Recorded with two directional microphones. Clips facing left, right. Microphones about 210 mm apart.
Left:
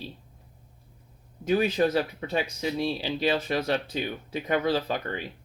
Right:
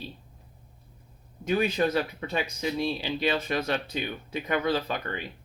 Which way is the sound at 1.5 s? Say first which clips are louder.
Left 2 dB; 35° left (ahead or behind).